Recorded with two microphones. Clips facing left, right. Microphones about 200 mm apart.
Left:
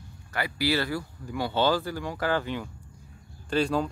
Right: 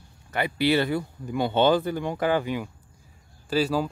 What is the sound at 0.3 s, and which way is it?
Speech, 20° right (ahead or behind).